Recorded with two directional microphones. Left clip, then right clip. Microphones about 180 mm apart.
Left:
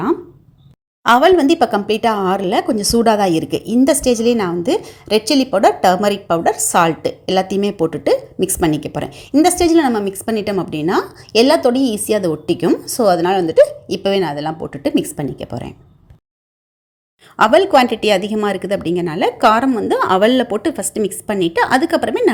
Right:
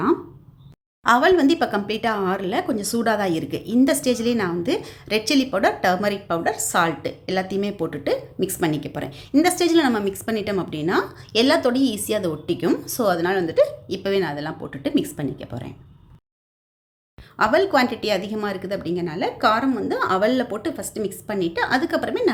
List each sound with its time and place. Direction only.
1.0 s a woman's voice: 30° left (ahead or behind)
17.3 s speech: 30° left (ahead or behind)